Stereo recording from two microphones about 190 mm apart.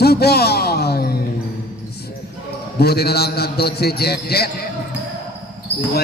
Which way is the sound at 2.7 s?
55° left (ahead or behind).